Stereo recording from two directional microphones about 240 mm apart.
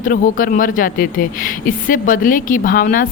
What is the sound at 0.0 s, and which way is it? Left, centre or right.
Speech, left.